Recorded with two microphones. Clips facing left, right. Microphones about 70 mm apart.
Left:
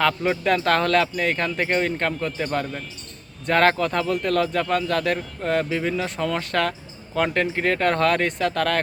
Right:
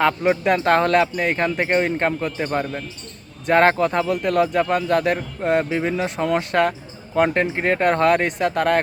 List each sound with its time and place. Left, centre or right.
0.0 s a man's voice: right